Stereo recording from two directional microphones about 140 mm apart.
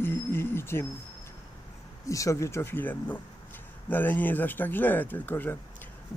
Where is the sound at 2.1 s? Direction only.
20° left (ahead or behind).